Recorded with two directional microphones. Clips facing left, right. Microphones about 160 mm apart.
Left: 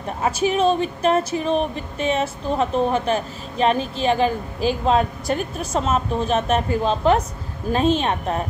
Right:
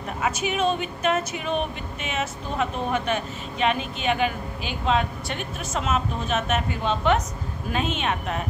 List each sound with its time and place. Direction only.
0.2 s speech: 35° left (ahead or behind)